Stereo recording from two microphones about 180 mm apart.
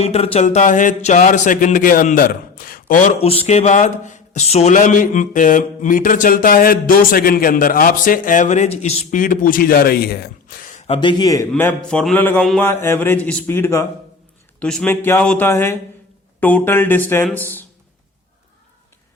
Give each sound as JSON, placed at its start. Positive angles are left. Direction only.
{"t": 0.0, "sound": "speech", "side_deg": 35}
{"t": 11.2, "sound": "speech", "side_deg": 20}
{"t": 12.6, "sound": "speech", "side_deg": 15}